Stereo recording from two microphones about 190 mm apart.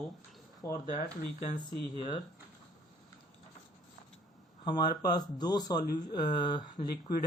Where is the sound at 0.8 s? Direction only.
40° left (ahead or behind).